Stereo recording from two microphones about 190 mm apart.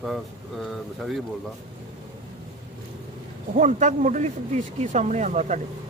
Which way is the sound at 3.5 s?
40° right (ahead or behind).